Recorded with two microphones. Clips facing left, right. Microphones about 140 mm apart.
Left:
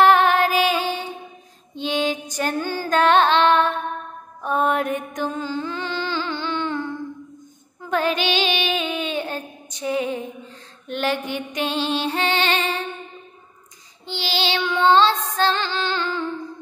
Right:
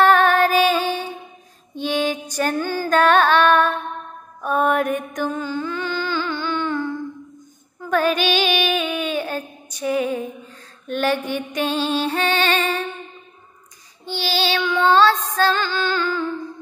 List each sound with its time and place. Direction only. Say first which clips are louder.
0.0 s music: right 1 dB; 15° left (ahead or behind)
1.8 s female singing: right 1 dB; 20° left (ahead or behind)
4.4 s music: right 2 dB; 25° left (ahead or behind)
7.9 s child singing: right 2 dB; 20° left (ahead or behind)
10.9 s music: right 3 dB; 20° left (ahead or behind)
14.0 s child singing: right 2 dB; 20° left (ahead or behind)